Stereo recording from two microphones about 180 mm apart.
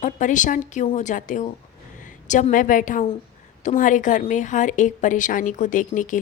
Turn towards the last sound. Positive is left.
turn(degrees=45)  # may be behind; listen again after turning